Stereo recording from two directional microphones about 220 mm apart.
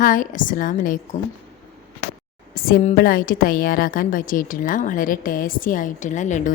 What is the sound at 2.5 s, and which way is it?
A woman's voice, 40° left (ahead or behind).